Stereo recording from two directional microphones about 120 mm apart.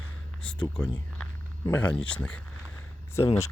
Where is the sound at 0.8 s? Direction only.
10° left (ahead or behind).